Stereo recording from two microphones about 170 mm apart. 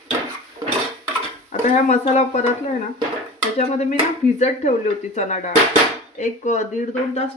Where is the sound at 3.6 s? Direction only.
40° left (ahead or behind).